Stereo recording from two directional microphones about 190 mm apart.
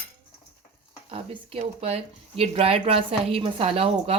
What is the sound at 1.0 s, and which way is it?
Speech, 30° right (ahead or behind).